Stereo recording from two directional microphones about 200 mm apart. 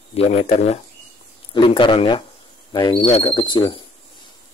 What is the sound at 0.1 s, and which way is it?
Speech, 30° left (ahead or behind).